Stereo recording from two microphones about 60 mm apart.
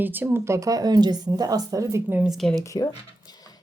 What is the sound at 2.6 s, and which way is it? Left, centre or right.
Speech, left.